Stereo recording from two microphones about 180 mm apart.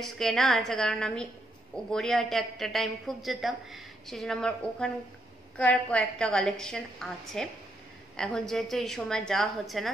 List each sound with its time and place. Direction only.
0.0 s a woman's voice: centre (ahead or behind)